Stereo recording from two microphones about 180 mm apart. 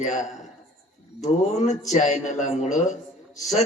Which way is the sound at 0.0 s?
40° left (ahead or behind).